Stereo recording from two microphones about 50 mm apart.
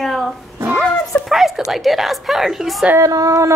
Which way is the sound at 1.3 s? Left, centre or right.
Centre.